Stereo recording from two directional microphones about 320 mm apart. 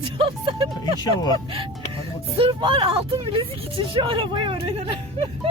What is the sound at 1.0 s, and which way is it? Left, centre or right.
Speech, centre.